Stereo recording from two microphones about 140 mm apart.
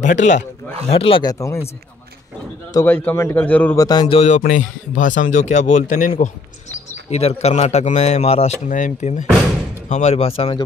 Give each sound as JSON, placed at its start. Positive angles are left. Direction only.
{"t": 0.0, "sound": "speech", "side_deg": 60}
{"t": 0.8, "sound": "speech", "side_deg": 40}
{"t": 1.2, "sound": "speech", "side_deg": 25}
{"t": 2.7, "sound": "a man's voice", "side_deg": 15}
{"t": 3.7, "sound": "speech", "side_deg": 25}
{"t": 4.4, "sound": "a man's voice", "side_deg": 65}
{"t": 7.1, "sound": "speech", "side_deg": 45}
{"t": 9.8, "sound": "speech", "side_deg": 55}